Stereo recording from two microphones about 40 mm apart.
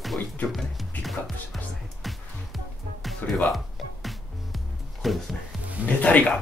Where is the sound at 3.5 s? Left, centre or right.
Centre.